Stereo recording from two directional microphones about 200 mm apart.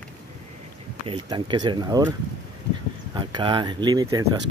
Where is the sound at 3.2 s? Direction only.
20° right (ahead or behind).